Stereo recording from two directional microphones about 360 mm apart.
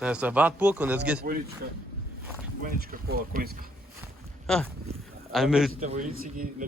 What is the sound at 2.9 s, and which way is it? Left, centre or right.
Speech, right.